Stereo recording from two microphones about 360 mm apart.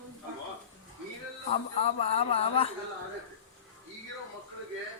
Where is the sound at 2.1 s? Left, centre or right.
Centre.